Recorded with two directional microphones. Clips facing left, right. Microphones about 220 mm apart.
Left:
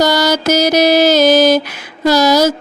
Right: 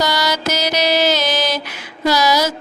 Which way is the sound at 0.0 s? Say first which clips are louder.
Left 7 dB; 45° left (ahead or behind).